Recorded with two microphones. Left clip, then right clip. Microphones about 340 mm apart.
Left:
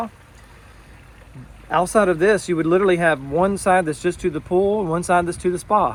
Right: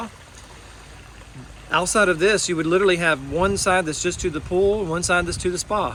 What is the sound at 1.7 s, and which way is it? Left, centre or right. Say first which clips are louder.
Speech: left 1 dB; centre.